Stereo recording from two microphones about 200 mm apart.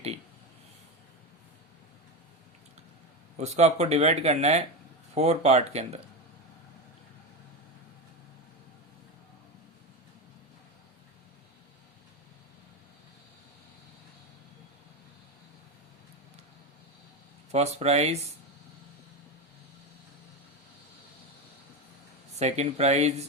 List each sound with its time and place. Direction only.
3.3 s speech: 35° right (ahead or behind)
17.5 s speech: 30° right (ahead or behind)
22.4 s speech: 35° right (ahead or behind)